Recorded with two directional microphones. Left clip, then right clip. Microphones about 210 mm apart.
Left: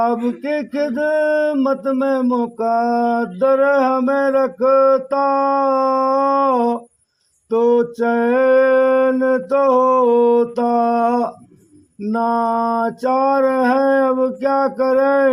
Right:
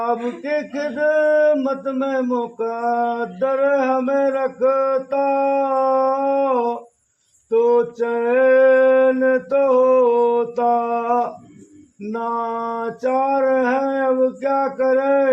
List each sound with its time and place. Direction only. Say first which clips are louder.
0.0 s speech: left 3 dB; 45° left (ahead or behind)